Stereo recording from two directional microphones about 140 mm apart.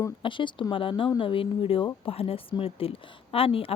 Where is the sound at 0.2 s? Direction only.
35° left (ahead or behind).